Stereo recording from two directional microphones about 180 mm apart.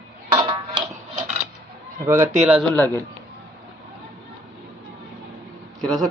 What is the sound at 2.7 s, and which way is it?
Speech, 10° left (ahead or behind).